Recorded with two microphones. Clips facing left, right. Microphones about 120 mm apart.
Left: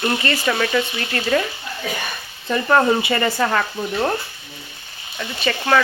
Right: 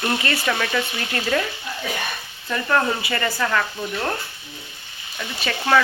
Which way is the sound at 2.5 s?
30° left (ahead or behind).